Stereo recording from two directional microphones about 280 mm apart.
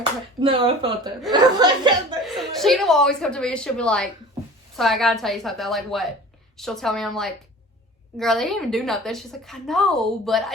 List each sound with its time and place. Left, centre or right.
0.3 s speech: centre
2.2 s a woman's voice: centre